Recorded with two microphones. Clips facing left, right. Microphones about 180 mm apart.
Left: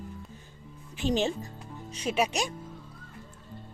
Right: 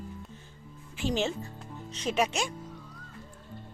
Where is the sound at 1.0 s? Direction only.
20° left (ahead or behind).